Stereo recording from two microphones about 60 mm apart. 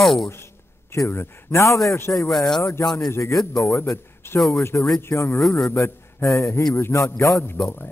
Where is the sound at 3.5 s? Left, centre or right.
Left.